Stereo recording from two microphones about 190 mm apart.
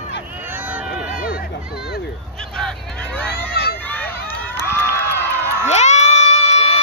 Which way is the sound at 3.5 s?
55° left (ahead or behind).